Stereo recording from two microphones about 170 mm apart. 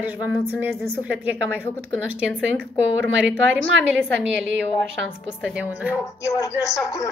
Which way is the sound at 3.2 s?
5° right (ahead or behind).